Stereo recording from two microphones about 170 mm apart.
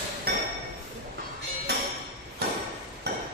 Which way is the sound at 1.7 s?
75° right (ahead or behind).